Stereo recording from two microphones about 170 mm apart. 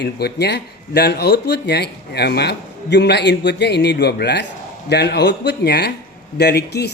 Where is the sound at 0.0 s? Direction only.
75° left (ahead or behind).